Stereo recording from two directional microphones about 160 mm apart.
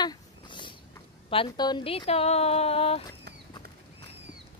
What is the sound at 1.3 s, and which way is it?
Speech, 30° left (ahead or behind).